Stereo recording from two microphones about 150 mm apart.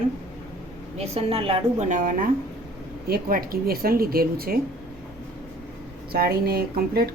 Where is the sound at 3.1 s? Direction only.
75° right (ahead or behind).